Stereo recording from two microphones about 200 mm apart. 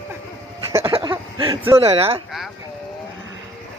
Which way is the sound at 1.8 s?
30° right (ahead or behind).